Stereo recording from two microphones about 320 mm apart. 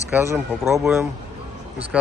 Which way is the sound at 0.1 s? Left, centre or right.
Centre.